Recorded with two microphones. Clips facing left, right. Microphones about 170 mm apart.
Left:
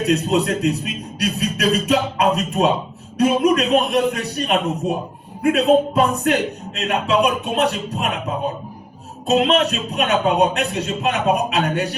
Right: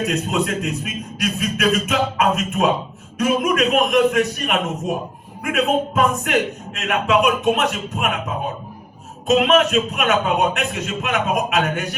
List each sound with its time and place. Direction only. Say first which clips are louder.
0.0 s a man's voice: left 3 dB; 35° left (ahead or behind)
9.2 s a man's voice: right 1 dB; 35° left (ahead or behind)